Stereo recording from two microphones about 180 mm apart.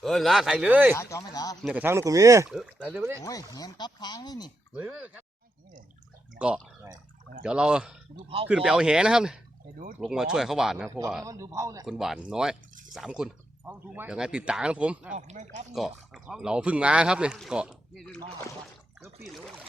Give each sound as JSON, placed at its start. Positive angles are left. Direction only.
{"t": 0.0, "sound": "speech", "side_deg": 0}
{"t": 0.9, "sound": "speech", "side_deg": 20}
{"t": 1.6, "sound": "speech", "side_deg": -10}
{"t": 2.5, "sound": "speech", "side_deg": -5}
{"t": 2.9, "sound": "speech", "side_deg": -15}
{"t": 3.2, "sound": "speech", "side_deg": 20}
{"t": 4.7, "sound": "speech", "side_deg": -10}
{"t": 6.4, "sound": "speech", "side_deg": -5}
{"t": 10.8, "sound": "speech", "side_deg": -15}
{"t": 11.9, "sound": "speech", "side_deg": 0}
{"t": 15.1, "sound": "speech", "side_deg": -40}
{"t": 15.7, "sound": "speech", "side_deg": 0}
{"t": 19.2, "sound": "speech", "side_deg": 0}